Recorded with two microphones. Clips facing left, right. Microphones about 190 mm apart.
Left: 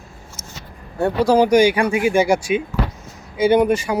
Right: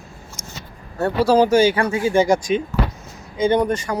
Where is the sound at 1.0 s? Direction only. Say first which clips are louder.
Left 1 dB; 15° left (ahead or behind).